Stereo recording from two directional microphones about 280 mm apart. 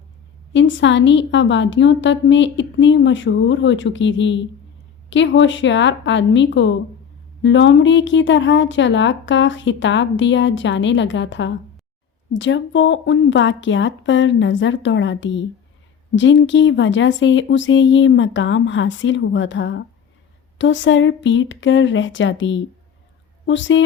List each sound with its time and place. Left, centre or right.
0.5 s speech: left